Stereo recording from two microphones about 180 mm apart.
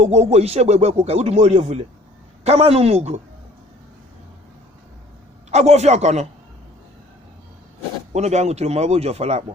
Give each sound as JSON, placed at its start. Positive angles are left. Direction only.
{"t": 0.0, "sound": "speech", "side_deg": -35}
{"t": 5.5, "sound": "speech", "side_deg": -40}
{"t": 8.1, "sound": "speech", "side_deg": -40}